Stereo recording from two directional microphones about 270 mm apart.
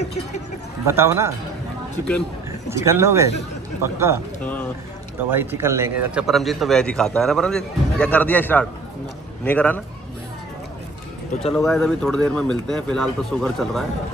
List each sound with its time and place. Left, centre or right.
0.8 s speech: centre
2.7 s speech: centre
4.4 s speech: centre
5.3 s speech: centre
11.5 s speech: centre